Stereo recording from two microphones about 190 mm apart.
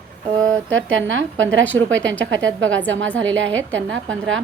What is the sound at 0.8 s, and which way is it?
A woman's voice, 85° right.